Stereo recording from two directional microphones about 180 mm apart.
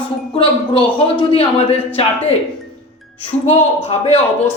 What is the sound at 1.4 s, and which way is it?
Speech, 30° left (ahead or behind).